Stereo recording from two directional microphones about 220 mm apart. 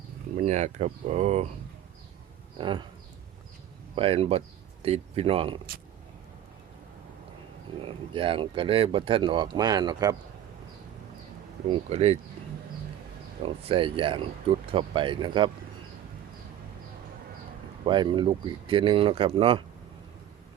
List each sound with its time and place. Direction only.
0.3 s speech: 30° right (ahead or behind)
2.6 s speech: 20° right (ahead or behind)
3.9 s speech: 25° right (ahead or behind)
7.9 s speech: 25° right (ahead or behind)
11.7 s speech: 30° right (ahead or behind)
13.4 s speech: 25° right (ahead or behind)
17.8 s speech: 20° right (ahead or behind)